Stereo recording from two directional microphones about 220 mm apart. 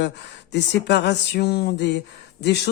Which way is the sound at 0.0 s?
50° left (ahead or behind).